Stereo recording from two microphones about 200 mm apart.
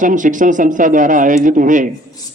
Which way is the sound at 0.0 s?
40° right (ahead or behind).